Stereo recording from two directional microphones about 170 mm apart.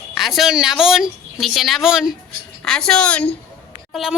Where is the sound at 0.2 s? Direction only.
Centre (ahead or behind).